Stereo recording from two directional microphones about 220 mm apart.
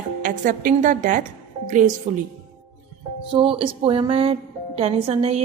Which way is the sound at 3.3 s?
25° right (ahead or behind).